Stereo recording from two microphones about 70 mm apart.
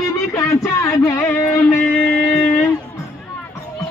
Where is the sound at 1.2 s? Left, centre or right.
Left.